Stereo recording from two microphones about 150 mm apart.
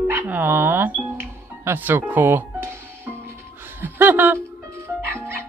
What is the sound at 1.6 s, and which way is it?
Music, 15° right (ahead or behind).